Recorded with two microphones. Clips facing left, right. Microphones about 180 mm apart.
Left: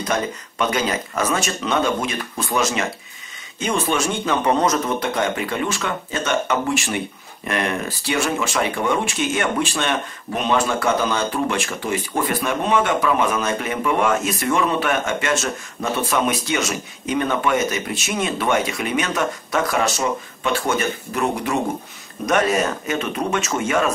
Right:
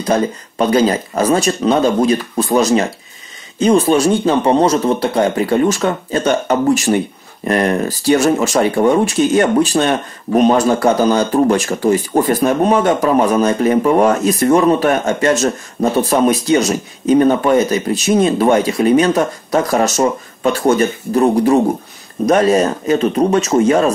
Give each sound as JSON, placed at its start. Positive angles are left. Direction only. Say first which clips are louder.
{"t": 0.0, "sound": "speech", "louder": "right 7 dB", "side_deg": -35}